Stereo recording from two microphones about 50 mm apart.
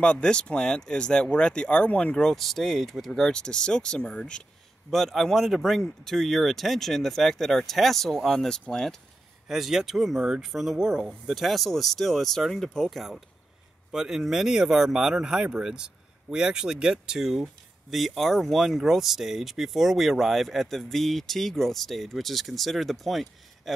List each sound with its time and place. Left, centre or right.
0.0 s speech: centre
2.1 s speech: centre
3.3 s speech: centre
4.9 s speech: centre
9.5 s speech: centre
11.3 s speech: centre
13.9 s speech: centre